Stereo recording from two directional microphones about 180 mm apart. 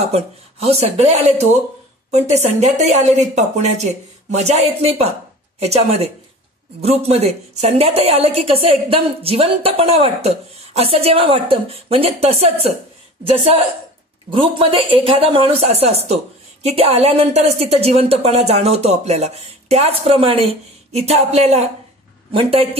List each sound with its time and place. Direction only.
0.1 s a woman's voice: 35° right (ahead or behind)
14.3 s a woman's voice: 30° right (ahead or behind)